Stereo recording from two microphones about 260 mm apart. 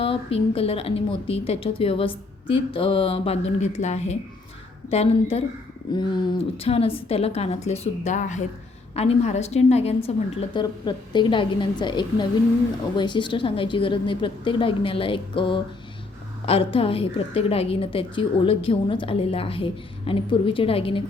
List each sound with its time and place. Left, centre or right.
0.0 s a woman's voice: left